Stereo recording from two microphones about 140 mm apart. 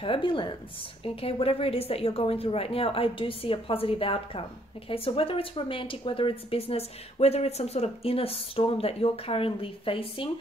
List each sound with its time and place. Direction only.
0.0 s a woman's voice: 40° left (ahead or behind)